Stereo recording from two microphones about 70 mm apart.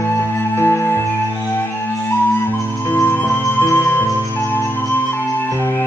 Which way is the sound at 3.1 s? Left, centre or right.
Left.